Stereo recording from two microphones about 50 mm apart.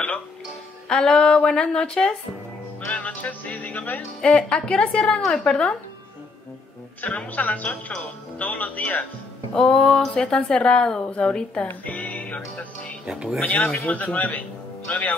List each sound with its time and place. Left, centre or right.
0.8 s speech: centre
2.9 s music: left
4.2 s a woman's voice: centre
7.0 s music: left
9.5 s speech: centre
11.6 s speech: left
13.0 s speech: centre
13.4 s music: left